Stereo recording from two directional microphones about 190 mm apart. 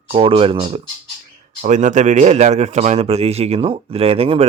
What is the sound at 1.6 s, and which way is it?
Speech, 40° right (ahead or behind).